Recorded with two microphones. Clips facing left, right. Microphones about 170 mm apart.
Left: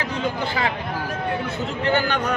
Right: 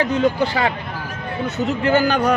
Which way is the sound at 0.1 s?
40° right (ahead or behind).